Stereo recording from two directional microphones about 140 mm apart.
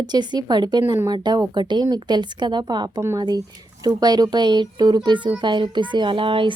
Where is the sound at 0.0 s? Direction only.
30° right (ahead or behind).